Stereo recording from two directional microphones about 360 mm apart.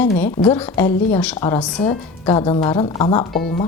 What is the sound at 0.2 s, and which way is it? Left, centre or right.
A woman's voice, centre.